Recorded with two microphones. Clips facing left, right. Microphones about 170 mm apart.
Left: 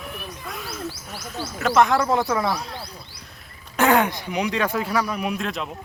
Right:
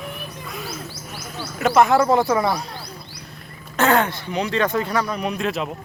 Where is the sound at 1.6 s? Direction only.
5° right (ahead or behind).